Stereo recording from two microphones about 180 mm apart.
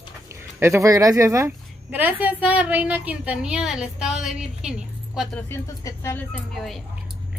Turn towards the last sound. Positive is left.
turn(degrees=0)  # may be behind; listen again after turning